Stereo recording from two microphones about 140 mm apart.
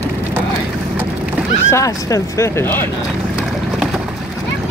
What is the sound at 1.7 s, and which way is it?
Speech, 20° left (ahead or behind).